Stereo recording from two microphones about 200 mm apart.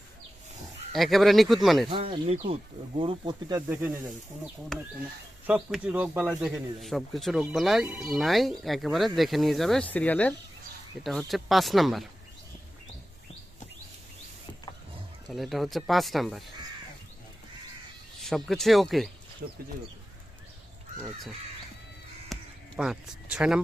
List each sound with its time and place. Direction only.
0.9 s speech: centre (ahead or behind)
1.9 s speech: 25° right (ahead or behind)
3.7 s speech: 10° right (ahead or behind)
4.7 s speech: centre (ahead or behind)
15.3 s speech: centre (ahead or behind)
18.2 s speech: centre (ahead or behind)
22.3 s a sound: centre (ahead or behind)
22.8 s speech: 5° right (ahead or behind)